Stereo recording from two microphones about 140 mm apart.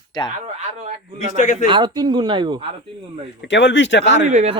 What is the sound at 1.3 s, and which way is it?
Speech, 65° left (ahead or behind).